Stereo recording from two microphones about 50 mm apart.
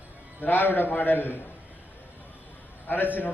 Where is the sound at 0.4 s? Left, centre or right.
Left.